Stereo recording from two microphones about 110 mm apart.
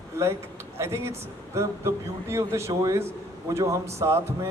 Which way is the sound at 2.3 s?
25° right (ahead or behind).